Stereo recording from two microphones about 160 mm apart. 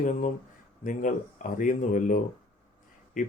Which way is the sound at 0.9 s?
55° left (ahead or behind).